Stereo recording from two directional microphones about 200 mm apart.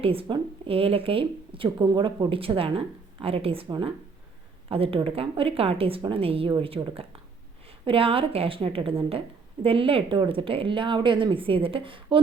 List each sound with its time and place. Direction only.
0.0 s speech: 30° right (ahead or behind)